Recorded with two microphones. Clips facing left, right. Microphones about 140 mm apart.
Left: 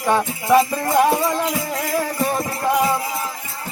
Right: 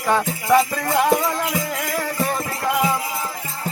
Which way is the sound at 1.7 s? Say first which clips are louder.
Left 3 dB; 25° left (ahead or behind).